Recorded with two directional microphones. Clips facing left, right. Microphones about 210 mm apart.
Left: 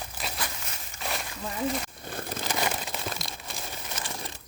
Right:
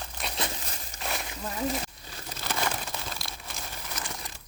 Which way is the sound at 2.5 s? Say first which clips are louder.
Even; 20° left (ahead or behind).